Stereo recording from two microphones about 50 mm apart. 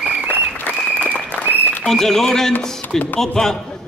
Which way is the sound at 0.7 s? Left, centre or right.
Left.